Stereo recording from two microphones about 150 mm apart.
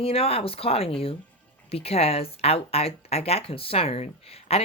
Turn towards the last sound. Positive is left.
turn(degrees=40)  # may be behind; listen again after turning